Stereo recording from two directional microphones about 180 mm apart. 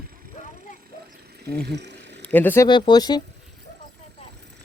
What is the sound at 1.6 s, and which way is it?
Speech, 70° right (ahead or behind).